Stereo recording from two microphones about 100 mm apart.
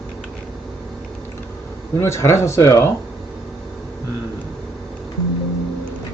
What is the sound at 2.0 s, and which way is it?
Speech, 30° left (ahead or behind).